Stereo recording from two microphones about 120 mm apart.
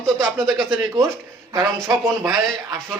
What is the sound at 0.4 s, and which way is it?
Speech, centre (ahead or behind).